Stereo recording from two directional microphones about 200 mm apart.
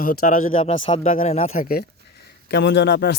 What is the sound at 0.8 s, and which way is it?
Speech, 25° left (ahead or behind).